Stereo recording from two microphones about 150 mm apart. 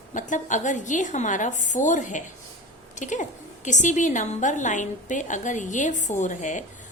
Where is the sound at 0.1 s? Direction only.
55° left (ahead or behind).